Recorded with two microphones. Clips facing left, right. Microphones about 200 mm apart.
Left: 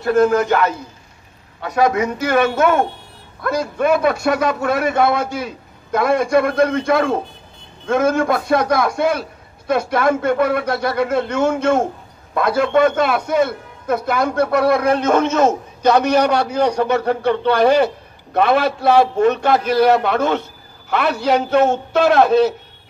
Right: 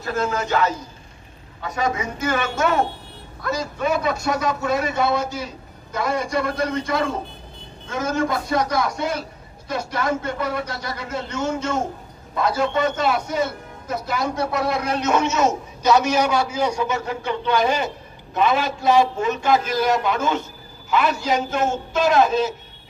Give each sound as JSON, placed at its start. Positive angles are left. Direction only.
{"t": 0.0, "sound": "speech", "side_deg": 55}
{"t": 1.6, "sound": "a man's voice", "side_deg": 65}